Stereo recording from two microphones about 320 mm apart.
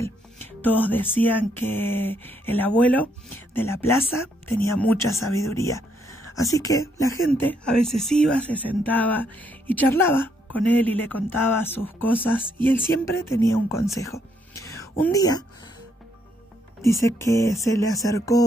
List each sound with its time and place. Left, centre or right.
0.7 s speech: centre
14.7 s a sound: centre
16.8 s speech: centre